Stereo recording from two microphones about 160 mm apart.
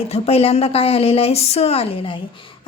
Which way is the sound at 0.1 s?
40° left (ahead or behind).